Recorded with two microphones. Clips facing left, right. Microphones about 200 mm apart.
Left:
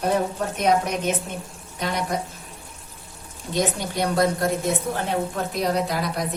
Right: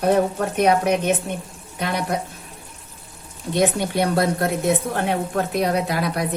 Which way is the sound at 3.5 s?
60° right (ahead or behind).